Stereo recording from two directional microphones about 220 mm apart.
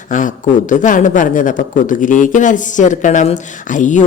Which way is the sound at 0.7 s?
35° left (ahead or behind).